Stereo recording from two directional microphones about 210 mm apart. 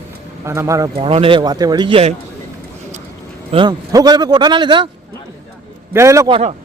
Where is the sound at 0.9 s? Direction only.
25° right (ahead or behind).